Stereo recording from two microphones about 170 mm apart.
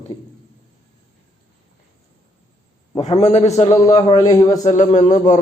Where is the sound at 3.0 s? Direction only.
40° left (ahead or behind).